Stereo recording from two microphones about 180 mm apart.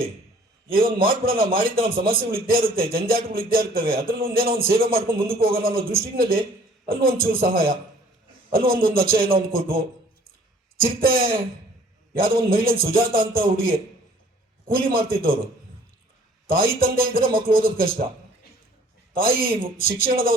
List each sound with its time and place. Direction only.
0.9 s a man's voice: 55° right (ahead or behind)
16.5 s speech: 55° right (ahead or behind)
19.1 s speech: 55° right (ahead or behind)